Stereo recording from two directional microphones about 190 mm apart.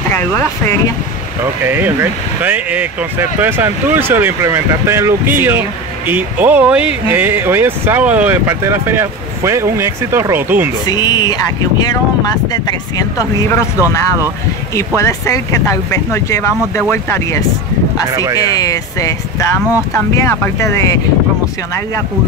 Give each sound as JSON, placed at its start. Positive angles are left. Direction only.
{"t": 1.7, "sound": "speech", "side_deg": -10}
{"t": 10.9, "sound": "speech", "side_deg": 20}
{"t": 12.6, "sound": "speech", "side_deg": 20}
{"t": 15.0, "sound": "speech", "side_deg": 15}
{"t": 18.1, "sound": "speech", "side_deg": -15}
{"t": 18.4, "sound": "speech", "side_deg": 20}
{"t": 20.2, "sound": "speech", "side_deg": 15}